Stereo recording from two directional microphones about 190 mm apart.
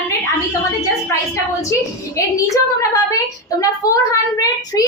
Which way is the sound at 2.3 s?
15° left (ahead or behind).